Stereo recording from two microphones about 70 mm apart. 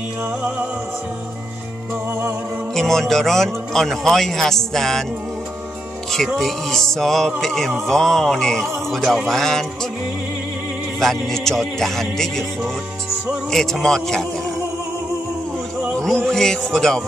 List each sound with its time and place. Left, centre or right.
2.7 s a man's voice: centre
6.1 s a man's voice: centre
11.0 s a man's voice: centre
13.5 s a man's voice: centre
16.0 s music: centre